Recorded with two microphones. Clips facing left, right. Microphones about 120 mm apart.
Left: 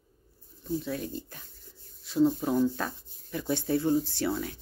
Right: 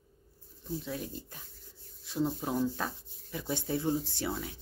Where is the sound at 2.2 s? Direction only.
5° right (ahead or behind).